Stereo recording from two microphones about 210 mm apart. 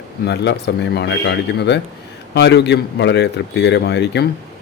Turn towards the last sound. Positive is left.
turn(degrees=55)  # may be behind; listen again after turning